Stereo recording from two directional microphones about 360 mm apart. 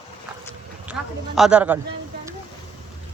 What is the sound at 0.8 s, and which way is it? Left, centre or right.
Speech, centre.